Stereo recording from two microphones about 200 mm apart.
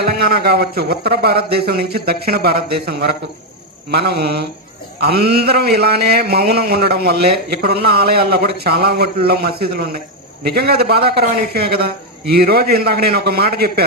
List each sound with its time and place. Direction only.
0.0 s a man's voice: 50° right (ahead or behind)